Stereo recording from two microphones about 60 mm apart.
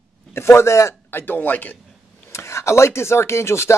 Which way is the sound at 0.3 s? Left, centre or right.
Left.